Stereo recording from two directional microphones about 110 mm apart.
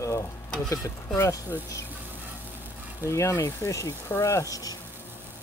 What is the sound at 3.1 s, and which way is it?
Speech, 25° left (ahead or behind).